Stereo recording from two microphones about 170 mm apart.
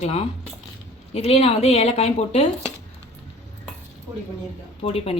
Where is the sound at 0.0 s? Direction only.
40° left (ahead or behind).